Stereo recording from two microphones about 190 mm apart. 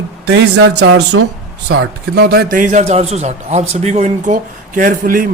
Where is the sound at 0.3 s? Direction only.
65° right (ahead or behind).